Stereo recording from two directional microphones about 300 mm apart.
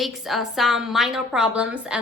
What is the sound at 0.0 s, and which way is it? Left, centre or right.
A woman's voice, centre.